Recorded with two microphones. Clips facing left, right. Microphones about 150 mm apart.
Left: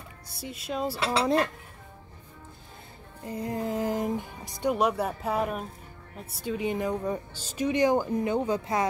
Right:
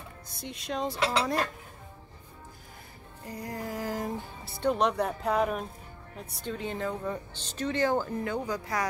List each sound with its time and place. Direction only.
0.4 s speech: 5° left (ahead or behind)
3.3 s speech: 20° left (ahead or behind)